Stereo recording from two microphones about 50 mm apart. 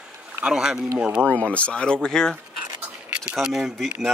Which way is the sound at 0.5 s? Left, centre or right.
Centre.